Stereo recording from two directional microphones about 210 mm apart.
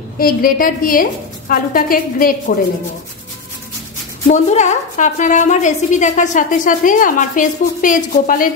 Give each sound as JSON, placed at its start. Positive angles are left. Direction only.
{"t": 0.2, "sound": "a woman's voice", "side_deg": 45}
{"t": 4.3, "sound": "a woman's voice", "side_deg": 35}